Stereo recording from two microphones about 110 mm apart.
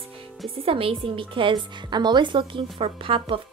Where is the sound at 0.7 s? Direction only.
55° right (ahead or behind).